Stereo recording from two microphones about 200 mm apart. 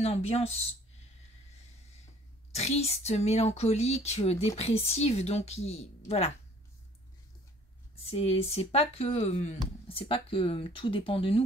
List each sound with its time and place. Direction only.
0.0 s speech: 30° left (ahead or behind)
2.5 s speech: 30° left (ahead or behind)
7.9 s speech: 30° left (ahead or behind)